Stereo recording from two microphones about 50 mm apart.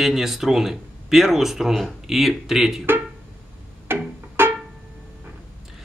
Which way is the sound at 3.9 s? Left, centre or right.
Right.